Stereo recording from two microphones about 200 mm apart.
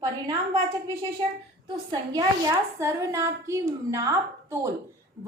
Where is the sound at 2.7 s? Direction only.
15° right (ahead or behind).